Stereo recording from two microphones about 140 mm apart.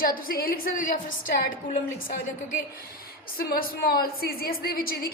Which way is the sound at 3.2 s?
90° left.